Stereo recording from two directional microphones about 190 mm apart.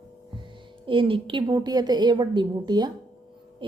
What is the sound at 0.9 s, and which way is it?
A woman's voice, 25° right (ahead or behind).